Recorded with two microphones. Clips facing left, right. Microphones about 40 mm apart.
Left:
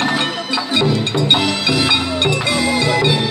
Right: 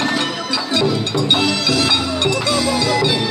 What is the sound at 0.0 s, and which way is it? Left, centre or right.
Music, centre.